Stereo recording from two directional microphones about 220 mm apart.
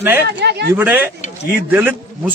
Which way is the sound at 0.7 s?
5° right (ahead or behind).